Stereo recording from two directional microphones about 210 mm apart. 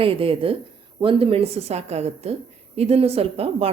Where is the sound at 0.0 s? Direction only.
25° right (ahead or behind).